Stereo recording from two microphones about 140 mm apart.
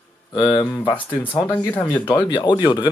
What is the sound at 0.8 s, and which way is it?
Speech, 15° left (ahead or behind).